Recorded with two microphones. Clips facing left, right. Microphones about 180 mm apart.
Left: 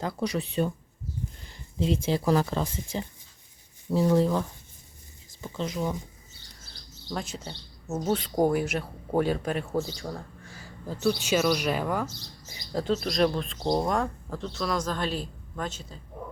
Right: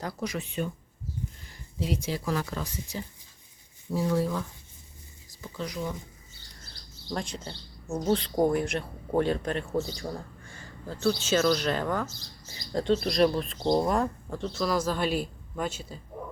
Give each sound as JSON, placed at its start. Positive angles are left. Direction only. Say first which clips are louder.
{"t": 0.0, "sound": "speech", "louder": "left 4 dB", "side_deg": 30}
{"t": 5.3, "sound": "speech", "louder": "left 3 dB", "side_deg": 25}
{"t": 7.1, "sound": "speech", "louder": "even", "side_deg": 5}
{"t": 10.8, "sound": "speech", "louder": "left 1 dB", "side_deg": 15}
{"t": 13.6, "sound": "speech", "louder": "right 2 dB", "side_deg": 10}
{"t": 13.8, "sound": "speech", "louder": "right 1 dB", "side_deg": 0}